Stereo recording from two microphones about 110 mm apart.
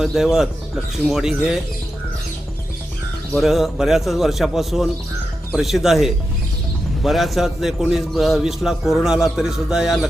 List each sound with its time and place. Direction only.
0.0 s a man's voice: 5° right (ahead or behind)
3.3 s a man's voice: centre (ahead or behind)